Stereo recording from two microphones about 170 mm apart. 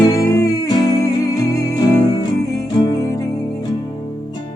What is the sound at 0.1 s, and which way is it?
Music, 20° left (ahead or behind).